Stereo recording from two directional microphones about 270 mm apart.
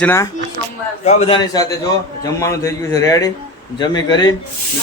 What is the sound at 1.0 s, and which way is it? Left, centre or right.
A man's voice, left.